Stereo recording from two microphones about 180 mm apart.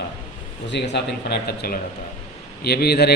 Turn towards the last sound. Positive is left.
turn(degrees=60)  # may be behind; listen again after turning